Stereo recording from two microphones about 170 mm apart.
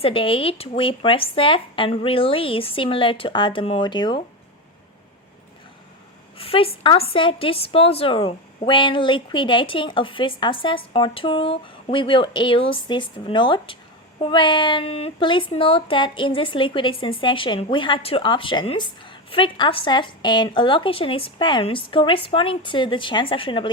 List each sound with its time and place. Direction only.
0.0 s speech: 30° left (ahead or behind)
6.3 s a woman's voice: 35° left (ahead or behind)